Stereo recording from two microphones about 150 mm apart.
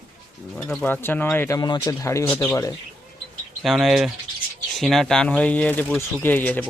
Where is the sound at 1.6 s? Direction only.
30° left (ahead or behind).